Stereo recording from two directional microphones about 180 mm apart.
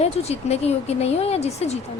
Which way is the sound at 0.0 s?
35° left (ahead or behind).